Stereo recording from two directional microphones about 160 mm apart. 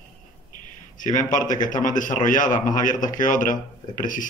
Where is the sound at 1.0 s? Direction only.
50° left (ahead or behind).